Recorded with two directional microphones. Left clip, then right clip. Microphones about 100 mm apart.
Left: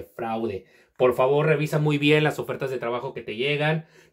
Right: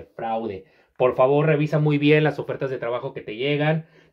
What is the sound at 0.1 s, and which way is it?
Speech, 30° left (ahead or behind).